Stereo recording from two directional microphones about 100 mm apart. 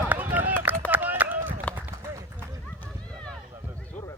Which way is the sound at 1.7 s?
15° left (ahead or behind).